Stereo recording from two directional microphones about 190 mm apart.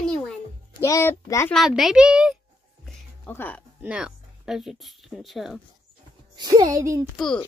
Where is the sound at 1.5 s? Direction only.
Centre (ahead or behind).